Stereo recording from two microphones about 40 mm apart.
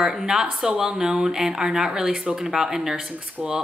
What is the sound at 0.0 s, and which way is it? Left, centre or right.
Speech, centre.